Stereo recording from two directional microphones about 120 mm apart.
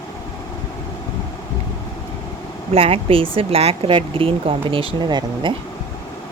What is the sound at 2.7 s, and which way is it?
Speech, 55° right (ahead or behind).